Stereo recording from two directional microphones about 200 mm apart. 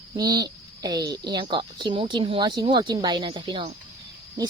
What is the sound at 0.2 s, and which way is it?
A woman's voice, 20° right (ahead or behind).